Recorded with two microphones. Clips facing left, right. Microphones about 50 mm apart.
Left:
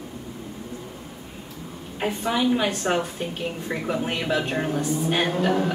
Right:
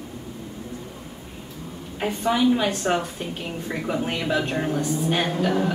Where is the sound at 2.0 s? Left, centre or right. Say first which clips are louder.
Right 2 dB; centre.